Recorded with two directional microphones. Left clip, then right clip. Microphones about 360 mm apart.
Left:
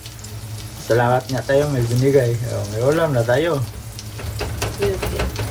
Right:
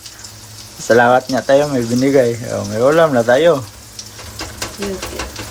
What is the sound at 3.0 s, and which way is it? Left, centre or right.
Speech, centre.